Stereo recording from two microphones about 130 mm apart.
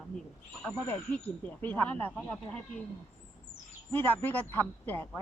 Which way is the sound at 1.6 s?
15° left (ahead or behind).